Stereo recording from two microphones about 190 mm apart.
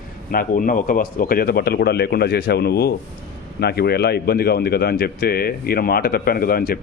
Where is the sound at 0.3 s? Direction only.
50° left (ahead or behind).